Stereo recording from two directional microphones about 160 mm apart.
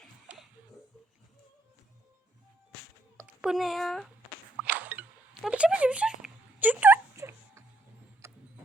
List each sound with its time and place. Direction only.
0.3 s music: 10° right (ahead or behind)
3.2 s speech: 5° right (ahead or behind)
4.5 s a sound: 10° right (ahead or behind)